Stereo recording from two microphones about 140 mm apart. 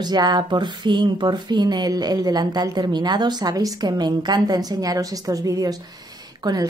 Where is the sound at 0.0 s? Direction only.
30° right (ahead or behind).